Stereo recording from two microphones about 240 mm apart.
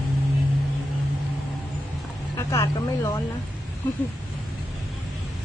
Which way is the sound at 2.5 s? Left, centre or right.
Centre.